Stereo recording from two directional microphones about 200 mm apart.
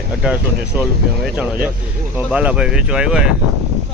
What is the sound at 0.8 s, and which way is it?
Speech, 5° right (ahead or behind).